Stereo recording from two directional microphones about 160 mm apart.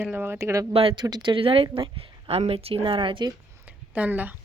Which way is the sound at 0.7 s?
35° right (ahead or behind).